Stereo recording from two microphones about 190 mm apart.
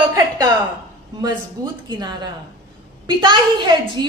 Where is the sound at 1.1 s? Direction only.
20° right (ahead or behind).